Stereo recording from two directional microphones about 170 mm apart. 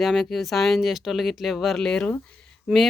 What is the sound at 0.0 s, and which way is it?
Speech, centre (ahead or behind).